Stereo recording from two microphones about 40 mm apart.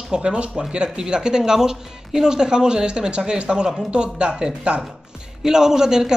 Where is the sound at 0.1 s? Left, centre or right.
Right.